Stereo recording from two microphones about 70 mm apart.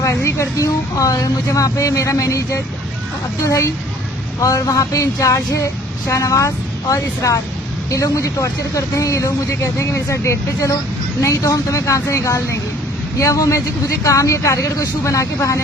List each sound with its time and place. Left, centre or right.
0.0 s speech: left